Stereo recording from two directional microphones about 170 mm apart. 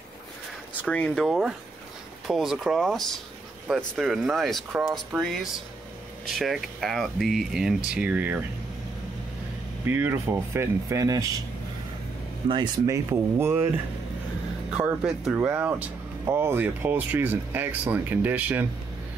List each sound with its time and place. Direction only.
0.8 s speech: 5° left (ahead or behind); by 8.5 s 10° right (ahead or behind)
9.8 s speech: 10° right (ahead or behind)
12.4 s speech: 20° right (ahead or behind)
14.7 s speech: 5° right (ahead or behind)